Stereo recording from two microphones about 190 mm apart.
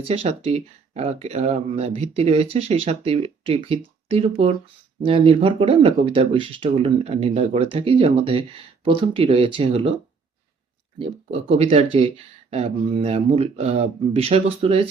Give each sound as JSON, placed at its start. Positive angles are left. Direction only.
{"t": 0.0, "sound": "speech", "side_deg": -30}
{"t": 10.9, "sound": "speech", "side_deg": -30}